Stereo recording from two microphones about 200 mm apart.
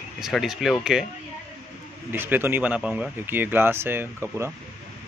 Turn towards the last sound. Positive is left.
turn(degrees=-10)  # may be behind; listen again after turning